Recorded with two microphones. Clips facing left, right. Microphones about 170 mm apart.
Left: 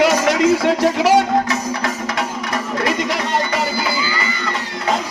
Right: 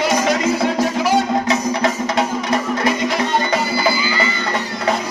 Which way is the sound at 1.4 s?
20° right (ahead or behind).